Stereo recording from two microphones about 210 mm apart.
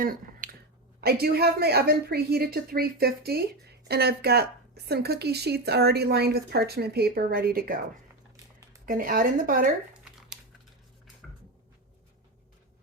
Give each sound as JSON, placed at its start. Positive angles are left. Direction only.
{"t": 0.0, "sound": "finger snapping", "side_deg": -40}
{"t": 1.0, "sound": "speech", "side_deg": -45}
{"t": 8.9, "sound": "speech", "side_deg": -40}